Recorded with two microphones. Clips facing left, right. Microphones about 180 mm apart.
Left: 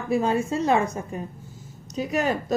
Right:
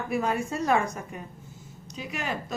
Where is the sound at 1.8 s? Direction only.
40° left (ahead or behind).